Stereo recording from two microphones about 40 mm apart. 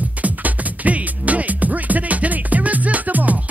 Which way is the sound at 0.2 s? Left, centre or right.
Right.